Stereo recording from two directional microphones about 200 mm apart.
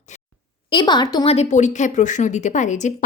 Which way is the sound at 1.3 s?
35° left (ahead or behind).